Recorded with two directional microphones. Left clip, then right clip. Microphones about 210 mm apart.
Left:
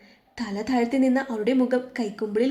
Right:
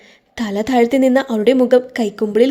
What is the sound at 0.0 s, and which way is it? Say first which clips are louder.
A woman's voice: right 9 dB; 40° right (ahead or behind).